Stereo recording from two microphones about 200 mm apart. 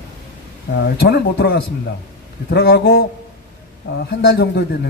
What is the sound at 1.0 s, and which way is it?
A man's voice, 55° left (ahead or behind).